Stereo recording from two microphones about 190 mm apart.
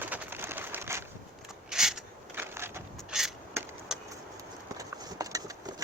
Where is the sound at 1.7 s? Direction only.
5° right (ahead or behind).